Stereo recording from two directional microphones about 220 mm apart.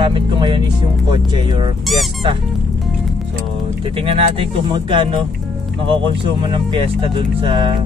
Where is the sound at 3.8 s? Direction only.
25° right (ahead or behind).